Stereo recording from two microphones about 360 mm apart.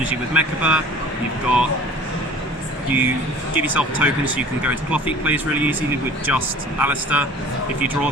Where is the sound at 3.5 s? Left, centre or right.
Centre.